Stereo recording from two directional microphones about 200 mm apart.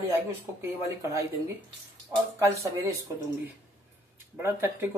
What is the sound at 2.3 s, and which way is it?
Speech, 15° right (ahead or behind).